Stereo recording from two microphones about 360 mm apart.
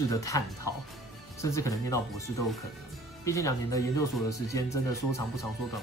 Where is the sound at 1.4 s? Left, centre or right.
Centre.